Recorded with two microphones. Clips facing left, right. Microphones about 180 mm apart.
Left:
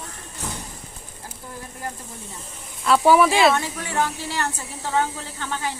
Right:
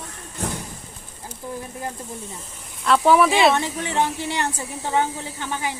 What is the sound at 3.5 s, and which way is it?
Speech, 20° right (ahead or behind).